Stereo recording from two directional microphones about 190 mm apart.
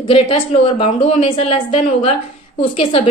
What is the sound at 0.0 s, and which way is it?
A woman's voice, 30° left (ahead or behind).